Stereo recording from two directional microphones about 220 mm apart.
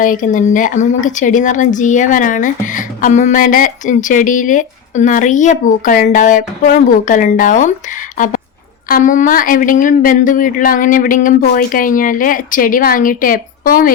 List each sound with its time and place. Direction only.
0.0 s speech: 35° left (ahead or behind)
8.9 s speech: 35° left (ahead or behind)